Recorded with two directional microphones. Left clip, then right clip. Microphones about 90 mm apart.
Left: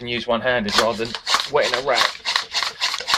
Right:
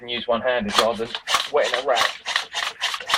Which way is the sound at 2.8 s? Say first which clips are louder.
Left 3 dB; 40° left (ahead or behind).